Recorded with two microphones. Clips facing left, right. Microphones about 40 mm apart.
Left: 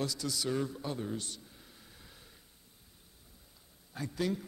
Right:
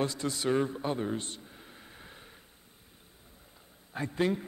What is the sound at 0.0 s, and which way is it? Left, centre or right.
A man's voice, right.